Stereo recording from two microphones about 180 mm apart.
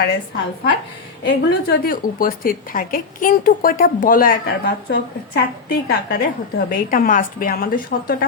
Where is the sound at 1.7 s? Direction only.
55° left (ahead or behind).